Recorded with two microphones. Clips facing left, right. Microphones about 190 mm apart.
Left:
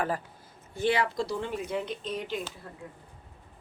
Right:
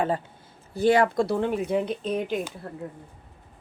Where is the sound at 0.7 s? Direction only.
40° right (ahead or behind).